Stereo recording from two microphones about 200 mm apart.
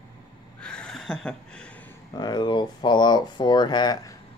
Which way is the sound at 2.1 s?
20° left (ahead or behind).